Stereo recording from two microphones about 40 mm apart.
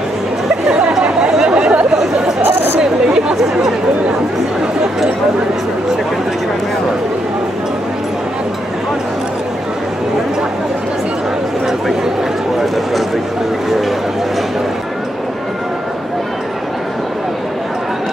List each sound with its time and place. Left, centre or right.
1.3 s chatter: centre
2.4 s chatter: right
2.8 s chatter: centre